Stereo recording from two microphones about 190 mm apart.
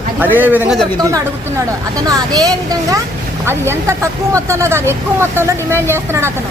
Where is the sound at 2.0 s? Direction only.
20° right (ahead or behind).